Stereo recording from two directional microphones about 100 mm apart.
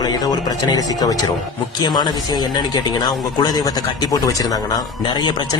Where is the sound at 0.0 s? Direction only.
40° left (ahead or behind).